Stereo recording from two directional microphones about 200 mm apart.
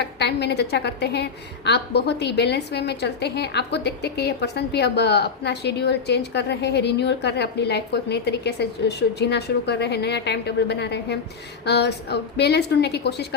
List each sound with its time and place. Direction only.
0.0 s a woman's voice: 55° left (ahead or behind)